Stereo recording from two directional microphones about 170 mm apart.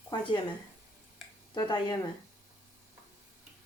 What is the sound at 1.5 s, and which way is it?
Speech, 25° left (ahead or behind).